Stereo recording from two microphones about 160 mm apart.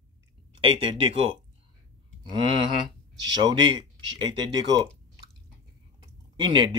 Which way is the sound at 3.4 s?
25° right (ahead or behind).